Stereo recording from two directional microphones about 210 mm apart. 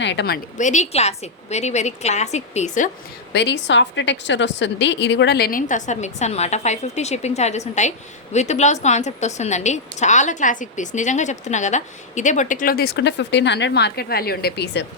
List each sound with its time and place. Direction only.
0.0 s a woman's voice: 55° left (ahead or behind)
0.5 s a woman's voice: 35° left (ahead or behind)
3.3 s a woman's voice: 55° left (ahead or behind)